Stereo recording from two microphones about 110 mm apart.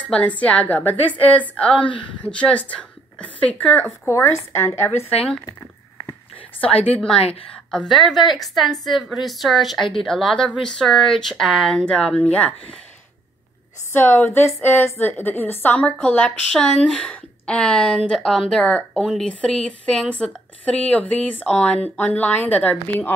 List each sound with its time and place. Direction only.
0.1 s a woman's voice: 15° left (ahead or behind)
4.1 s a woman's voice: 25° left (ahead or behind)
7.7 s a woman's voice: 5° left (ahead or behind)
13.9 s a woman's voice: 15° left (ahead or behind)